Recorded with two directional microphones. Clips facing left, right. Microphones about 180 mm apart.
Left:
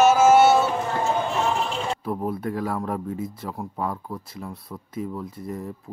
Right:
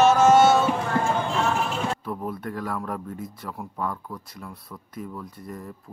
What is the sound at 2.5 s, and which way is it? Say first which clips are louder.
Speech: left 3 dB; 30° left (ahead or behind).